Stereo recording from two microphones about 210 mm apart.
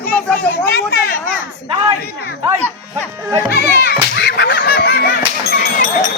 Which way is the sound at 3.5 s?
50° left (ahead or behind).